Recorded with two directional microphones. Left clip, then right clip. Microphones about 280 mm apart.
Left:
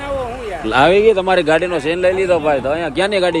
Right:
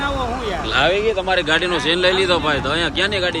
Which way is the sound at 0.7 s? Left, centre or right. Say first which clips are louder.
Left 7 dB; centre.